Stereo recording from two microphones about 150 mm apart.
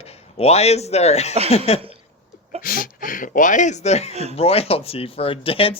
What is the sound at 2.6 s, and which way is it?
Speech, 70° left (ahead or behind).